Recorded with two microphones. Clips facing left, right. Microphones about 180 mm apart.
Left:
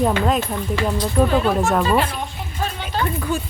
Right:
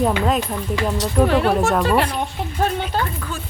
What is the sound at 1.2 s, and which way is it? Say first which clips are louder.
Speech: right 1 dB; 70° right (ahead or behind).